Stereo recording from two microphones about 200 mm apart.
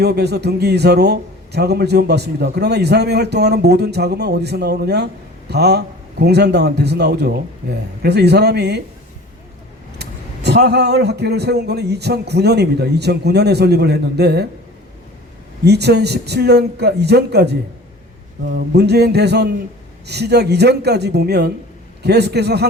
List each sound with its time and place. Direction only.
0.0 s a man's voice: 55° right (ahead or behind)
10.0 s a man's voice: 55° right (ahead or behind)
15.6 s a man's voice: 55° right (ahead or behind)